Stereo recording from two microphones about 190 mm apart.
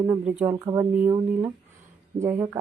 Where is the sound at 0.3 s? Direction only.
5° right (ahead or behind).